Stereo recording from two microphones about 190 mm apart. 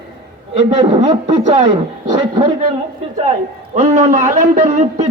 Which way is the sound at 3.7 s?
40° right (ahead or behind).